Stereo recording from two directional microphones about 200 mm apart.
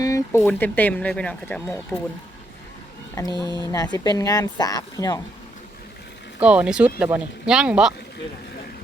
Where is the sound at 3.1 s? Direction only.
15° left (ahead or behind).